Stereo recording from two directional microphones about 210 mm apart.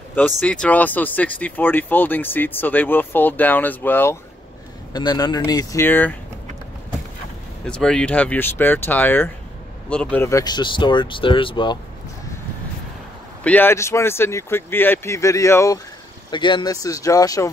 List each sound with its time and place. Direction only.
0.4 s speech: 5° left (ahead or behind)
7.6 s speech: 5° left (ahead or behind); by 11.8 s 20° left (ahead or behind)
13.4 s speech: 10° left (ahead or behind)